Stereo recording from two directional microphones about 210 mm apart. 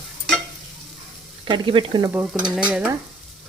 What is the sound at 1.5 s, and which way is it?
Stir, 25° right (ahead or behind).